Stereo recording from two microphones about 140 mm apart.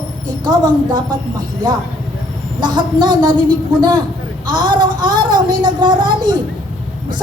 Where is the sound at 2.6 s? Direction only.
30° right (ahead or behind).